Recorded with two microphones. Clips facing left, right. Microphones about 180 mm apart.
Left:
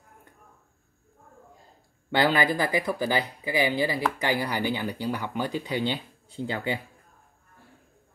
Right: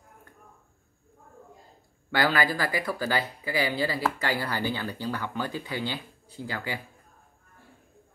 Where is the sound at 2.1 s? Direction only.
20° left (ahead or behind).